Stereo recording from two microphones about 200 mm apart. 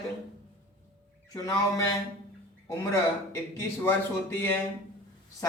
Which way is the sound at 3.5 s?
10° left (ahead or behind).